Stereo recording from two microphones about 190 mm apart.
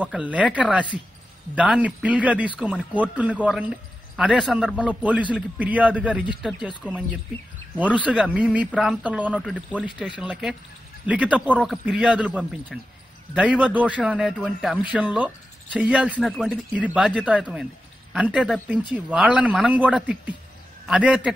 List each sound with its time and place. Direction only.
0.0 s a man's voice: 5° right (ahead or behind)
7.8 s a man's voice: 5° right (ahead or behind)